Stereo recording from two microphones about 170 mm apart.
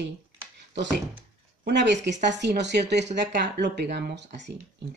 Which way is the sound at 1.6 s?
90° right.